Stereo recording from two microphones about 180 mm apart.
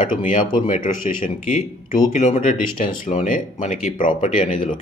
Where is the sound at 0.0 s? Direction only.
45° left (ahead or behind).